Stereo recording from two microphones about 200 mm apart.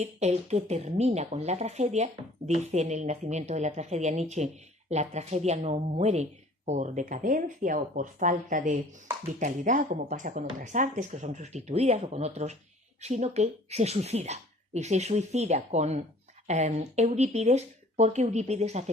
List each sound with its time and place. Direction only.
0.0 s speech: 35° right (ahead or behind)